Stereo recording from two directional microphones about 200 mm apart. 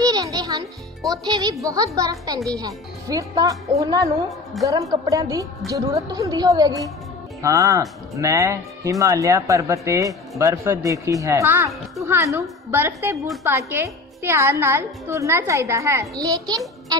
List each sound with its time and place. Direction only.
0.0 s music: 20° right (ahead or behind)
1.1 s speech: 15° right (ahead or behind)